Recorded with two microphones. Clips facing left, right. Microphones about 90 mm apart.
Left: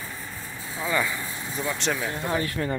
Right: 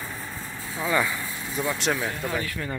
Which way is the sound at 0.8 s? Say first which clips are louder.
Right 1 dB; 5° right (ahead or behind).